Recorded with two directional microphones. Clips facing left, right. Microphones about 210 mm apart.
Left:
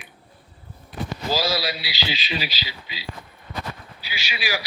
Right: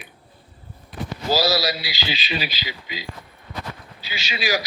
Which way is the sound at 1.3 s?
40° right (ahead or behind).